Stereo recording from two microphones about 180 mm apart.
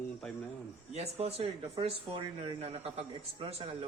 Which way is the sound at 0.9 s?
35° right (ahead or behind).